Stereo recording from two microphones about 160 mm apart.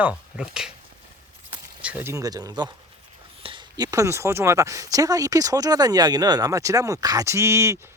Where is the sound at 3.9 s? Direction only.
20° right (ahead or behind).